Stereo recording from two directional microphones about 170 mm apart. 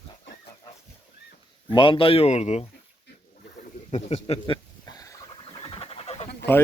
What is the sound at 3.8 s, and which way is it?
Speech, 35° left (ahead or behind).